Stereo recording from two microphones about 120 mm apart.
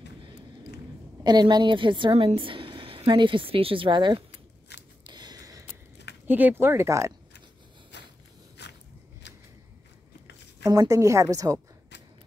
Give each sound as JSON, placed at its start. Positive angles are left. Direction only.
{"t": 1.2, "sound": "a woman's voice", "side_deg": -35}
{"t": 5.0, "sound": "a sound", "side_deg": -35}
{"t": 6.2, "sound": "a woman's voice", "side_deg": -15}
{"t": 10.6, "sound": "a woman's voice", "side_deg": -30}